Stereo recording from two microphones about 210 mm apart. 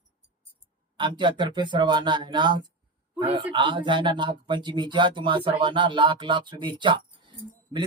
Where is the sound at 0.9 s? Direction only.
20° right (ahead or behind).